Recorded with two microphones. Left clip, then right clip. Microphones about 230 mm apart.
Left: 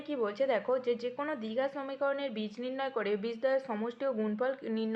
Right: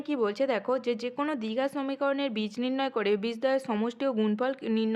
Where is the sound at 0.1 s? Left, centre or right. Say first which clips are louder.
Right 3 dB; right.